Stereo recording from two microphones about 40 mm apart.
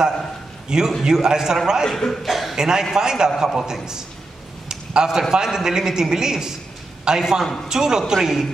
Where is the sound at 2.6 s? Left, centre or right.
Centre.